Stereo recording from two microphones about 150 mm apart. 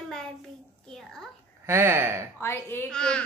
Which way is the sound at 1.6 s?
15° right (ahead or behind).